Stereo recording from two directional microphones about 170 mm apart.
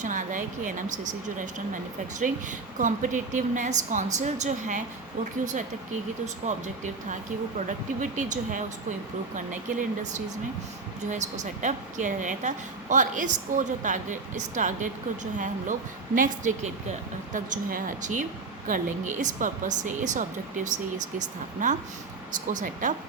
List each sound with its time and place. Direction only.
0.0 s a woman's voice: 50° right (ahead or behind)
6.5 s a woman's voice: 45° right (ahead or behind)
7.7 s a woman's voice: 50° right (ahead or behind)
21.6 s a woman's voice: 45° right (ahead or behind)